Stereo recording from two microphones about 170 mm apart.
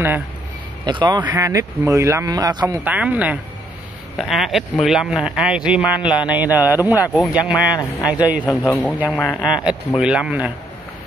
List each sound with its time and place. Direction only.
0.8 s speech: 25° right (ahead or behind)
1.2 s speech: 15° right (ahead or behind)
2.6 s speech: 10° right (ahead or behind)
9.1 s speech: 5° left (ahead or behind)
9.9 s speech: 5° right (ahead or behind)